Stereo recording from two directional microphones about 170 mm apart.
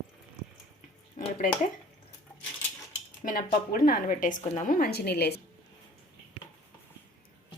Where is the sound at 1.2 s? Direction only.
45° left (ahead or behind).